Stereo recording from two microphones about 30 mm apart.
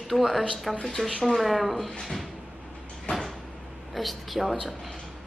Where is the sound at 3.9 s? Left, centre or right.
Centre.